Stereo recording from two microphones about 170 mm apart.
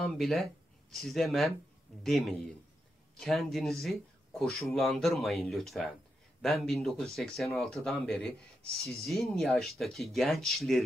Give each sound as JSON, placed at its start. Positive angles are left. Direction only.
{"t": 0.0, "sound": "speech", "side_deg": 0}